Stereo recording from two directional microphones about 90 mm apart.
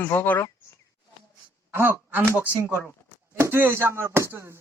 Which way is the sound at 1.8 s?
25° right (ahead or behind).